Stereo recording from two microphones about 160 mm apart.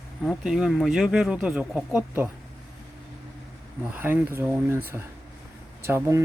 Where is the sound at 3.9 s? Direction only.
10° right (ahead or behind).